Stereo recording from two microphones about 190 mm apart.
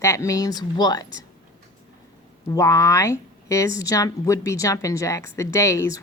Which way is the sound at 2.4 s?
15° left (ahead or behind).